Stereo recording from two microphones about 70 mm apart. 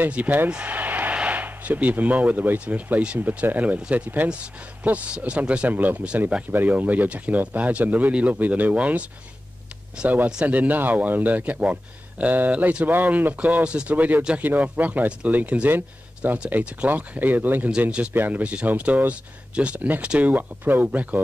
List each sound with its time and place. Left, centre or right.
0.0 s speech: right
0.5 s a sound: centre
1.1 s speech: right
10.0 s speech: right